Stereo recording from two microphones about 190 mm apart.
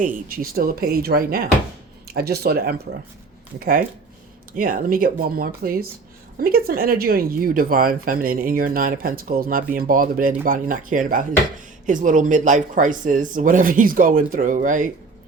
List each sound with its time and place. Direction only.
0.0 s speech: 50° right (ahead or behind)